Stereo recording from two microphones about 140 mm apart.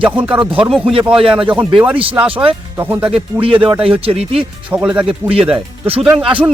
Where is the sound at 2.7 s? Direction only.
15° right (ahead or behind).